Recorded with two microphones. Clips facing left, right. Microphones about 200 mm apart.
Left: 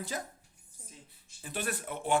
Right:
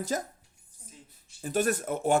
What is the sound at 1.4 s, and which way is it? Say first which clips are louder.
Speech: right 10 dB; 45° right (ahead or behind).